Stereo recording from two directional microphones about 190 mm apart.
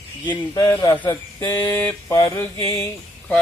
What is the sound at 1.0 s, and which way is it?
Speech, 15° left (ahead or behind).